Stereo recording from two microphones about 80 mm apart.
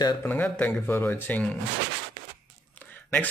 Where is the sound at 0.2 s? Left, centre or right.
Left.